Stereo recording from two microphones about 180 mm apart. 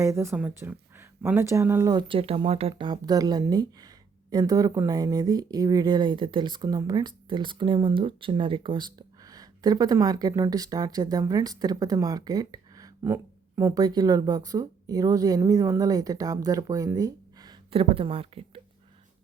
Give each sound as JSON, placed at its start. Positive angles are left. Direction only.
{"t": 0.0, "sound": "speech", "side_deg": -15}